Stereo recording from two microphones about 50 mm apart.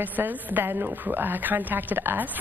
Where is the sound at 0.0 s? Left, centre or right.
Right.